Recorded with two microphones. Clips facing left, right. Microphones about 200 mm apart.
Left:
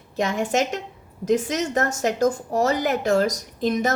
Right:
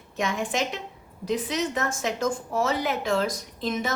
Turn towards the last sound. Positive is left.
turn(degrees=45)  # may be behind; listen again after turning